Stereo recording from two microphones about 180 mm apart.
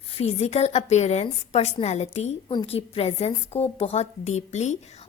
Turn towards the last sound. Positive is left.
turn(degrees=40)  # may be behind; listen again after turning